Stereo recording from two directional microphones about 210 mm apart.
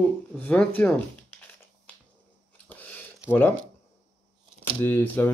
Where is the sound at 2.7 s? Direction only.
10° left (ahead or behind).